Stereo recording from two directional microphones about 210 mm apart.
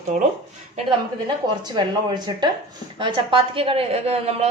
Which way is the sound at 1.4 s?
20° right (ahead or behind).